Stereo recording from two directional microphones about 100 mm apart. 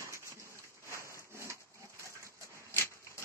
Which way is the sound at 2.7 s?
25° left (ahead or behind).